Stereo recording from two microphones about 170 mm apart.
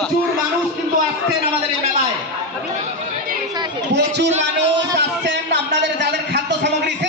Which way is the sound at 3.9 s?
85° right.